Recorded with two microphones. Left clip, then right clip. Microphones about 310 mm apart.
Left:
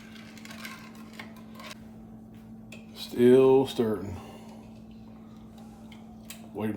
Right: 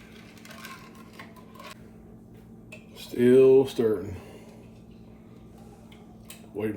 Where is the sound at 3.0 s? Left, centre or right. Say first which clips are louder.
Right 1 dB; left.